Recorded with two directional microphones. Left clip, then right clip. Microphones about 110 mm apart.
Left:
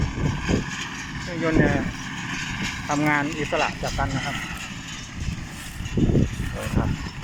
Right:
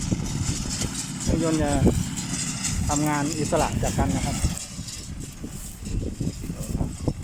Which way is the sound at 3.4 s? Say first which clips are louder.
Even; 35° right (ahead or behind).